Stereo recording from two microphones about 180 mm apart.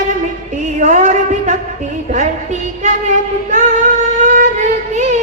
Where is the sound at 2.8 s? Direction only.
45° right (ahead or behind).